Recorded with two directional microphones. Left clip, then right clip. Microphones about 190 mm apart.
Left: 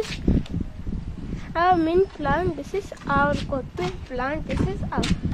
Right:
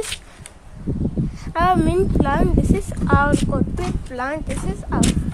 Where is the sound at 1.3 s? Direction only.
10° right (ahead or behind).